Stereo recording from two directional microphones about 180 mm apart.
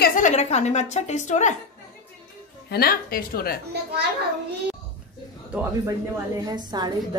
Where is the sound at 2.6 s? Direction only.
60° left (ahead or behind).